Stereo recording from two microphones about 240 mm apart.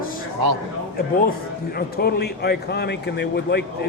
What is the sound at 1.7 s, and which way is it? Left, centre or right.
A man's voice, left.